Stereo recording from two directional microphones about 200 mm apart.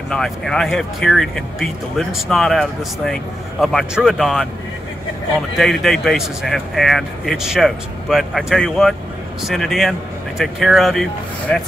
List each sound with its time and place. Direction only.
0.1 s speech: centre (ahead or behind)
5.6 s speech: centre (ahead or behind)